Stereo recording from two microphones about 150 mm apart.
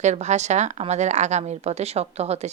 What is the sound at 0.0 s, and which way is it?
Speech, 50° right (ahead or behind).